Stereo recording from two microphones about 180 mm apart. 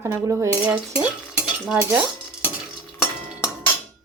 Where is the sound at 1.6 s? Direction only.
10° right (ahead or behind).